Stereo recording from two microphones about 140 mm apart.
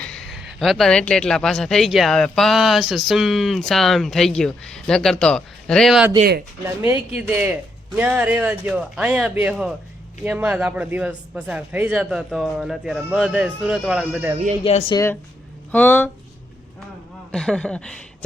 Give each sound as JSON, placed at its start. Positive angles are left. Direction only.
{"t": 0.0, "sound": "speech", "side_deg": 5}
{"t": 6.7, "sound": "speech", "side_deg": -15}
{"t": 14.6, "sound": "speech", "side_deg": 40}
{"t": 14.9, "sound": "speech", "side_deg": 20}
{"t": 17.3, "sound": "speech", "side_deg": 5}